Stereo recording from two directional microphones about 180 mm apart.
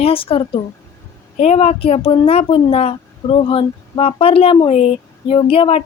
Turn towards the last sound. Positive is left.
turn(degrees=30)  # may be behind; listen again after turning